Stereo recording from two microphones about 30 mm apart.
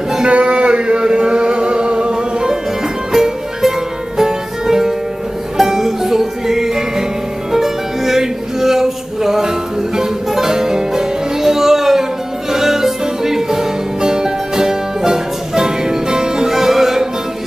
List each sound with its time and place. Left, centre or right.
0.2 s music: right
3.1 s music: centre